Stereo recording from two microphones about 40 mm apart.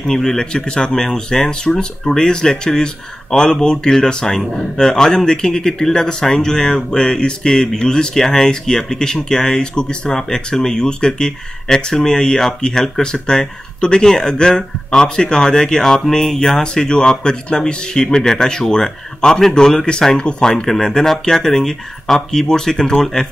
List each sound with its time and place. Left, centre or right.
0.0 s speech: centre
20.6 s speech: centre